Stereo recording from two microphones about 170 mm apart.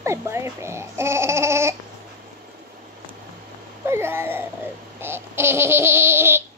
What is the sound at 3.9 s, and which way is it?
Baby cry, 15° right (ahead or behind).